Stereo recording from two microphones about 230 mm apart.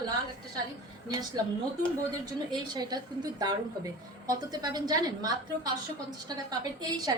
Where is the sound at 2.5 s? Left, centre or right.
Centre.